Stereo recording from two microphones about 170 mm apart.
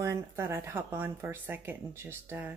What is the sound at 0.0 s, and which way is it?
Speech, 15° right (ahead or behind).